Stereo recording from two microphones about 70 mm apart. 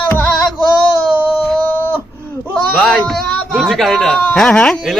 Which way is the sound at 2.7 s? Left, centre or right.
Centre.